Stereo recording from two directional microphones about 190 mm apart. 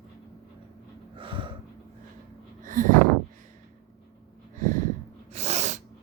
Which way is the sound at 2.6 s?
45° right (ahead or behind).